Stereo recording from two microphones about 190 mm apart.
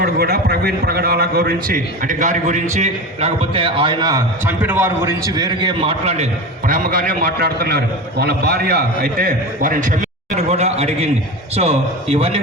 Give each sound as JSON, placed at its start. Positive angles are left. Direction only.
{"t": 0.0, "sound": "a man's voice", "side_deg": -60}
{"t": 6.7, "sound": "a man's voice", "side_deg": -45}